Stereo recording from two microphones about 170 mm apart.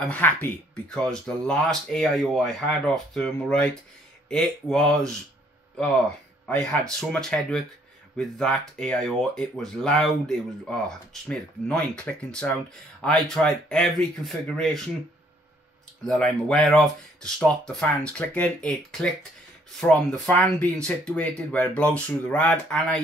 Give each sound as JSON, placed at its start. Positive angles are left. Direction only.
{"t": 0.0, "sound": "speech", "side_deg": 10}
{"t": 6.4, "sound": "speech", "side_deg": 5}
{"t": 16.0, "sound": "speech", "side_deg": 5}